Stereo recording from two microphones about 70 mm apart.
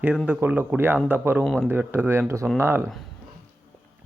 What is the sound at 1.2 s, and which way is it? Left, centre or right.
Speech, right.